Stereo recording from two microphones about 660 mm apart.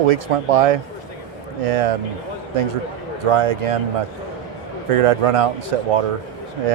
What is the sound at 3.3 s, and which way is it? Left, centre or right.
Speech, right.